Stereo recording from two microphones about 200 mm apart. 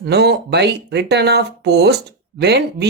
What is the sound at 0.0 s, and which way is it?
Speech, 55° right (ahead or behind).